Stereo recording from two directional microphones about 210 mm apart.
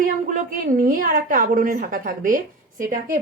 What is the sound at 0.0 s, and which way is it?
A woman's voice, 40° right (ahead or behind).